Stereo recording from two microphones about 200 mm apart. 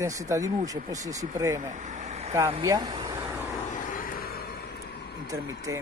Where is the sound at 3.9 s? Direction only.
45° left (ahead or behind).